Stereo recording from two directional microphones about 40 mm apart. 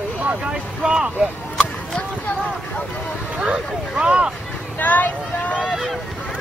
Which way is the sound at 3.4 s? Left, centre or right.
Right.